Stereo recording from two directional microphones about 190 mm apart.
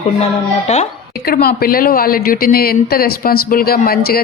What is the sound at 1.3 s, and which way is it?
A woman's voice, 50° left (ahead or behind).